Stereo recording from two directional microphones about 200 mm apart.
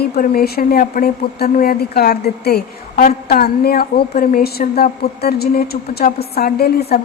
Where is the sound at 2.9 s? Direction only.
35° left (ahead or behind).